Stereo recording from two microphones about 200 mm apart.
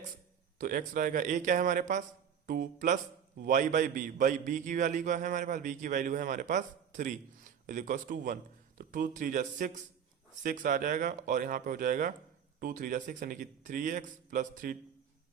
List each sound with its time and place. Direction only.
0.6 s a man's voice: 40° right (ahead or behind)